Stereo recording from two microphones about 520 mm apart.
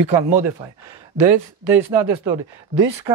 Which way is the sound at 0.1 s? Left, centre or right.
Right.